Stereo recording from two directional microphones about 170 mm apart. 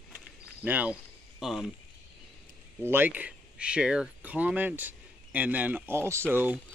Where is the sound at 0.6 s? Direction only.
10° right (ahead or behind).